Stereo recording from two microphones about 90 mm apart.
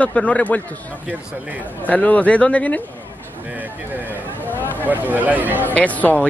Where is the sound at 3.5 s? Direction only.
20° right (ahead or behind).